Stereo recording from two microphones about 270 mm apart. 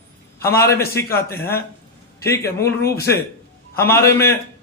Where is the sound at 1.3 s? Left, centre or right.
Left.